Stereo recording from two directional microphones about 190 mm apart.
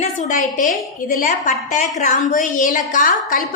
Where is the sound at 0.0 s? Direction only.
40° left (ahead or behind).